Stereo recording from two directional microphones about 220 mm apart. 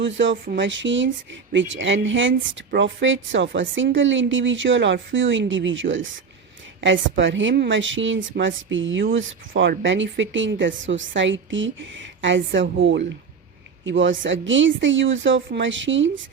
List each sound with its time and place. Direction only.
0.0 s speech: 60° right (ahead or behind)